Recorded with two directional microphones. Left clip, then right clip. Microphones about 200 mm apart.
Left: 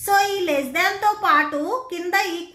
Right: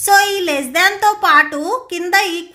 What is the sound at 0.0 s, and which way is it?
A woman's voice, 50° right (ahead or behind).